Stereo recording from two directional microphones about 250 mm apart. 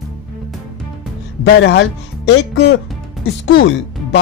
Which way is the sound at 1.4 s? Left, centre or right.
Left.